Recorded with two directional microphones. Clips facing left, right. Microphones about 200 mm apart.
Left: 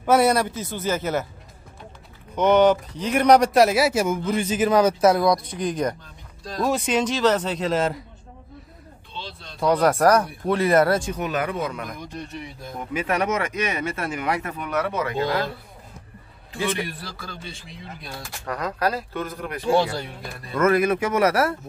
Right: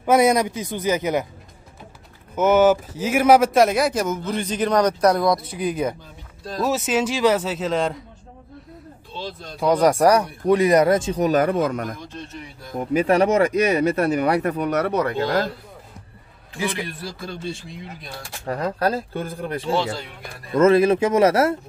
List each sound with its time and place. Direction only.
0.0 s a man's voice: 10° right (ahead or behind)
2.3 s a man's voice: 5° right (ahead or behind)
9.1 s a sound: 45° right (ahead or behind)
9.6 s a man's voice: 10° right (ahead or behind)
11.1 s speech: 40° right (ahead or behind)
12.0 s speech: 15° left (ahead or behind)
12.9 s speech: 35° right (ahead or behind)
18.4 s speech: 30° right (ahead or behind)